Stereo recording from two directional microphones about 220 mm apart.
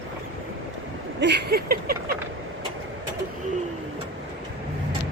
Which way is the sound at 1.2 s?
50° right (ahead or behind).